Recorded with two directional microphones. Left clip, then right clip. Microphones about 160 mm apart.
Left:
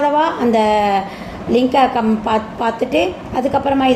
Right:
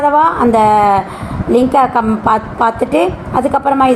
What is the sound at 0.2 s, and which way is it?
A woman's voice, 20° right (ahead or behind).